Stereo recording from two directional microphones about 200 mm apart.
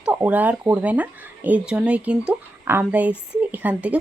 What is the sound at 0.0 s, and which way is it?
Speech, 5° right (ahead or behind).